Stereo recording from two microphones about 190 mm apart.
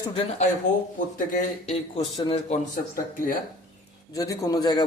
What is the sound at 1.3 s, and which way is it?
Speech, 40° left (ahead or behind).